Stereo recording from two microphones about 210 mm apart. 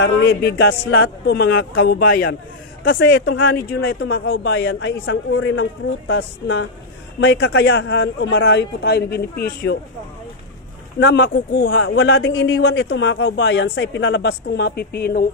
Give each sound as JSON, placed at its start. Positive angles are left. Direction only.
{"t": 0.0, "sound": "a man's voice", "side_deg": 50}
{"t": 2.9, "sound": "speech", "side_deg": 60}
{"t": 3.6, "sound": "a man's voice", "side_deg": 50}
{"t": 11.1, "sound": "speech", "side_deg": 60}